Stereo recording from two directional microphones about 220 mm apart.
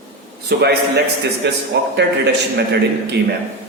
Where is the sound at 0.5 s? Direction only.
45° right (ahead or behind).